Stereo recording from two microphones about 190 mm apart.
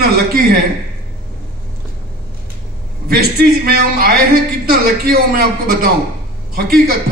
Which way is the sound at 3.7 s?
55° right (ahead or behind).